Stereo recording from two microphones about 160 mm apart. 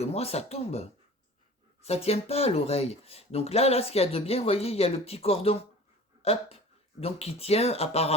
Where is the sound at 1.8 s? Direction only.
40° left (ahead or behind).